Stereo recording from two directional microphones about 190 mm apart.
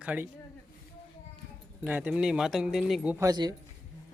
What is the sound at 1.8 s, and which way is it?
Speech, 10° right (ahead or behind).